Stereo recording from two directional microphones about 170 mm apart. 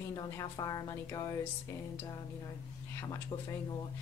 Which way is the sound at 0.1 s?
20° left (ahead or behind).